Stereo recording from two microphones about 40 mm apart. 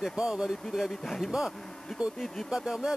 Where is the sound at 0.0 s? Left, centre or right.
Centre.